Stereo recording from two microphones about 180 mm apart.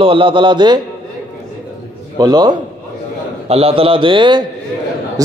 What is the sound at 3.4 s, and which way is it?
A man's voice, 35° right (ahead or behind).